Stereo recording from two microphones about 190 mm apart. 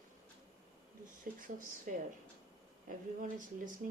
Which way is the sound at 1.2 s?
45° right (ahead or behind).